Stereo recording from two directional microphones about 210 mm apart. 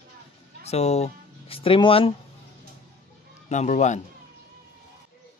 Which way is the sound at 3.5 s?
35° left (ahead or behind).